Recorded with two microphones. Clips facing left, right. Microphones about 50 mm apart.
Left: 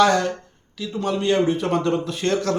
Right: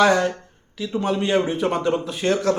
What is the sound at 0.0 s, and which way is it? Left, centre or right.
Speech, centre.